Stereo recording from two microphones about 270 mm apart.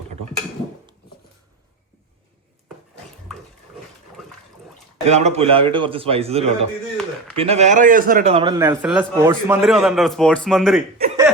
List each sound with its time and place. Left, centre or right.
5.0 s a man's voice: right; by 10.8 s centre